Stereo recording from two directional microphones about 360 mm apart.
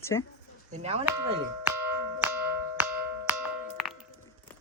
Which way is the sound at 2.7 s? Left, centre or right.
Centre.